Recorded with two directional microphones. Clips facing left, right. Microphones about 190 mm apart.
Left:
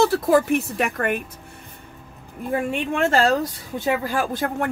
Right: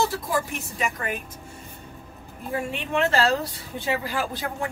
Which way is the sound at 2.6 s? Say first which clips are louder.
Left 1 dB; 50° left (ahead or behind).